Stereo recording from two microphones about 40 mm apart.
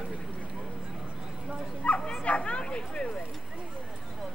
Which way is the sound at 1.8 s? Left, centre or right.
Left.